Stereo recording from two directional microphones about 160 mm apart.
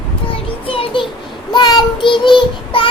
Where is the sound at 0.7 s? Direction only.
35° left (ahead or behind).